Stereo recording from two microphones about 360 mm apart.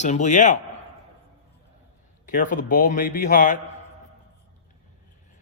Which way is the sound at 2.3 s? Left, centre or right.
Left.